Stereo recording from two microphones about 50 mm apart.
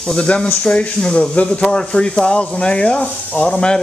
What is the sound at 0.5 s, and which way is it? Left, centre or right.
Speech, left.